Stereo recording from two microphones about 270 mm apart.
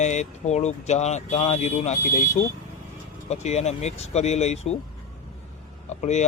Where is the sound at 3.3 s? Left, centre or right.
Left.